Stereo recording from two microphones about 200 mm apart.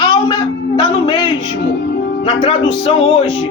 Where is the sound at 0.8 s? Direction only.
20° left (ahead or behind).